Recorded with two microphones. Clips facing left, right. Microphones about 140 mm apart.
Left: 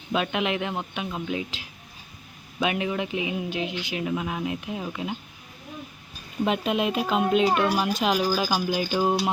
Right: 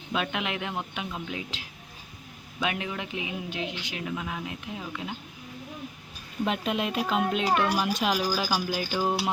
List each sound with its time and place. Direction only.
0.1 s a man's voice: 5° left (ahead or behind)
4.1 s speech: 20° left (ahead or behind)
6.4 s a man's voice: 5° left (ahead or behind)